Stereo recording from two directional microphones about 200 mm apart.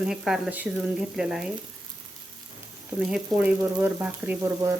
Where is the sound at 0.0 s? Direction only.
5° right (ahead or behind).